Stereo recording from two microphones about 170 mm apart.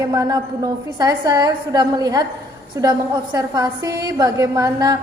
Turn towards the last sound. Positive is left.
turn(degrees=-20)  # may be behind; listen again after turning